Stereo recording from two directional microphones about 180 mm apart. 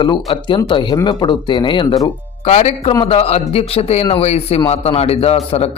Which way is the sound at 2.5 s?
35° left (ahead or behind).